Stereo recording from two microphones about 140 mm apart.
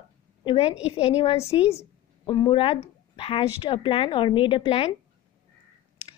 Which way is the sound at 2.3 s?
35° left (ahead or behind).